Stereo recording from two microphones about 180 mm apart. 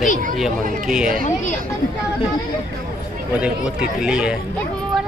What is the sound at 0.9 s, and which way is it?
Speech, 5° right (ahead or behind).